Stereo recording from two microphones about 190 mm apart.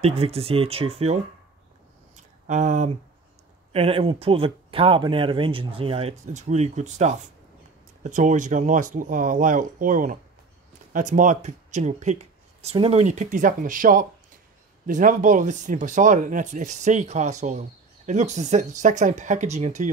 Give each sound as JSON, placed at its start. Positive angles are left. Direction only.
{"t": 0.0, "sound": "speech", "side_deg": -35}
{"t": 2.1, "sound": "a sound", "side_deg": -40}
{"t": 3.7, "sound": "speech", "side_deg": -30}